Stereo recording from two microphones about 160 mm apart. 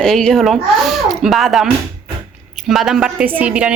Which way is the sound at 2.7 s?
Centre (ahead or behind).